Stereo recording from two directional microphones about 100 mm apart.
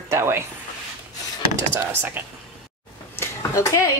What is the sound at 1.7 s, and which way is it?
Speech, 25° right (ahead or behind).